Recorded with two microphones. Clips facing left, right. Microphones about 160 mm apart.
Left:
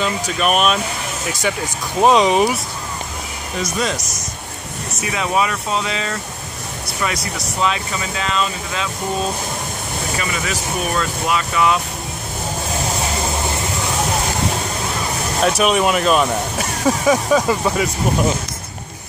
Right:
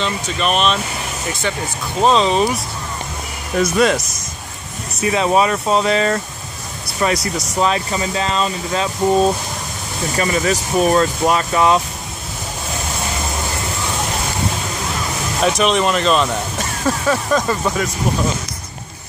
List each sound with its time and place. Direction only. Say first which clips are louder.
0.0 s speech: left 1 dB; 5° left (ahead or behind)
2.0 s speech: left 1 dB; 15° left (ahead or behind)
3.5 s speech: right 7 dB; 60° right (ahead or behind)
5.1 s speech: right 4 dB; 35° right (ahead or behind)
10.1 s speech: right 8 dB; 40° right (ahead or behind)
15.4 s speech: even; 5° left (ahead or behind)